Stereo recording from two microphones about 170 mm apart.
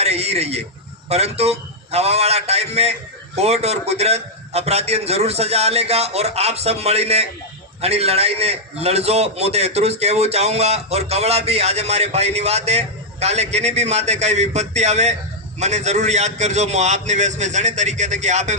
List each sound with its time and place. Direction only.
0.0 s a man's voice: 40° right (ahead or behind)